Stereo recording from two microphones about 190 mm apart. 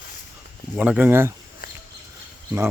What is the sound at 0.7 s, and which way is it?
Speech, 5° right (ahead or behind).